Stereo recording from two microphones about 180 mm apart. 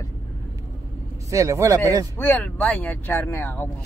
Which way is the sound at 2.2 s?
10° left (ahead or behind).